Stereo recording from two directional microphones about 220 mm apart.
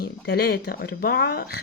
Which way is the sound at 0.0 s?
45° left (ahead or behind).